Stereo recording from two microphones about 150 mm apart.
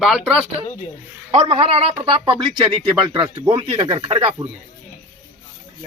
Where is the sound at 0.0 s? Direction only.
5° right (ahead or behind).